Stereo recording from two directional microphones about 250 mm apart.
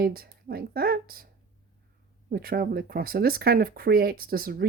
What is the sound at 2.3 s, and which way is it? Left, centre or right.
Speech, right.